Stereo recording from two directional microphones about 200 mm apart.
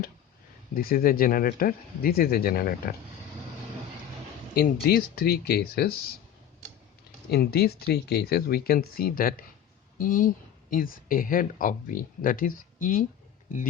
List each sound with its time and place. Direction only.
0.7 s speech: 45° left (ahead or behind)
4.5 s speech: 50° left (ahead or behind)
7.3 s speech: 55° left (ahead or behind)